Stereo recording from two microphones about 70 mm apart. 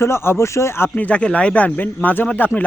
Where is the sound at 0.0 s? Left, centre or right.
Left.